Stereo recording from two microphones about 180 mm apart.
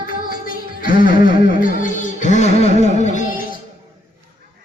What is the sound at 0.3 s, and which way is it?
Music, 50° left (ahead or behind).